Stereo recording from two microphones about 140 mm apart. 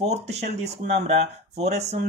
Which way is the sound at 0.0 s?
50° right (ahead or behind).